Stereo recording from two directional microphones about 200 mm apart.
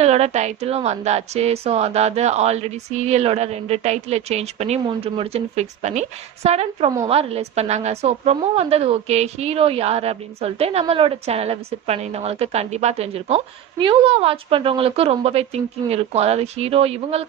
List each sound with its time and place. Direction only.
0.0 s a woman's voice: 30° right (ahead or behind)